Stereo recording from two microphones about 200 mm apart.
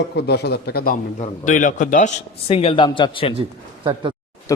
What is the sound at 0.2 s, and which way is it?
A man's voice, 55° left (ahead or behind).